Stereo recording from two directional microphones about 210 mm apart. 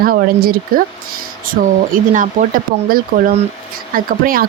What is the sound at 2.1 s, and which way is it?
Speech, 40° right (ahead or behind).